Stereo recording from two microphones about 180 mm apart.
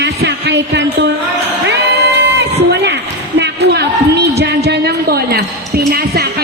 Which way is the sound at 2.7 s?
75° right (ahead or behind).